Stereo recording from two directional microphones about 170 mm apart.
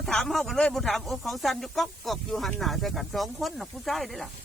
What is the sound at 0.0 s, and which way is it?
Speech, centre (ahead or behind).